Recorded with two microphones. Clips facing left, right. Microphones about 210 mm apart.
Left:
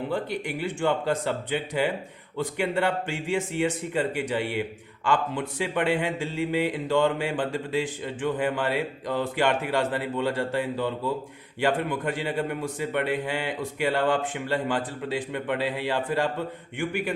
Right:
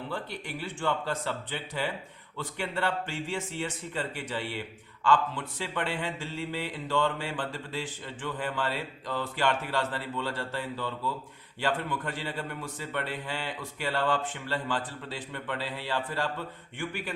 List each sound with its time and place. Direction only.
0.1 s a man's voice: 15° left (ahead or behind)